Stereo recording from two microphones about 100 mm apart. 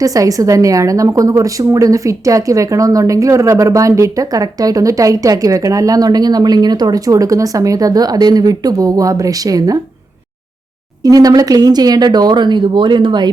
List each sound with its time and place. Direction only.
0.0 s a woman's voice: 35° right (ahead or behind)
11.0 s speech: 40° right (ahead or behind)